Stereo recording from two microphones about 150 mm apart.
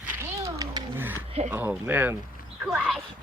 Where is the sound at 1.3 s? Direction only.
45° right (ahead or behind).